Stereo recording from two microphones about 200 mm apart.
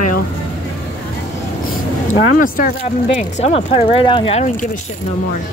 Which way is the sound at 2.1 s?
40° left (ahead or behind).